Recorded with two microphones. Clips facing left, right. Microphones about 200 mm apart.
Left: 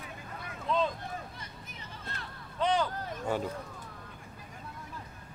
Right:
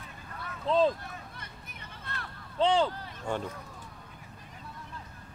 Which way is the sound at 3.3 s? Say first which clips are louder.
Left 1 dB; 5° left (ahead or behind).